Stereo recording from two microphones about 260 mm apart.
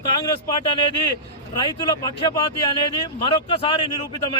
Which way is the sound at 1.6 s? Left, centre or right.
Centre.